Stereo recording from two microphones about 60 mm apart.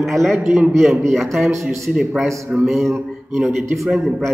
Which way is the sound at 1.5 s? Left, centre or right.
Right.